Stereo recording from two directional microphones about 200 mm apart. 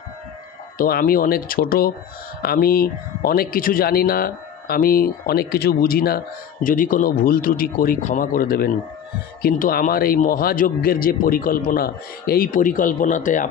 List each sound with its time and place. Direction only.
0.7 s speech: 45° left (ahead or behind)